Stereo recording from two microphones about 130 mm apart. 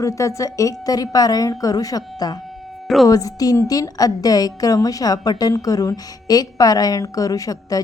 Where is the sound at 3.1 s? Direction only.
30° left (ahead or behind).